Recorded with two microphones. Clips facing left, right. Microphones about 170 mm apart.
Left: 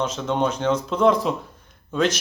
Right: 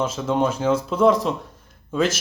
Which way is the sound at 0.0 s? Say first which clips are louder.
Right 1 dB; 5° right (ahead or behind).